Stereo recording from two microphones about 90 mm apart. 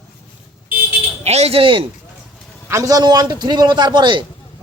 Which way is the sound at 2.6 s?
35° right (ahead or behind).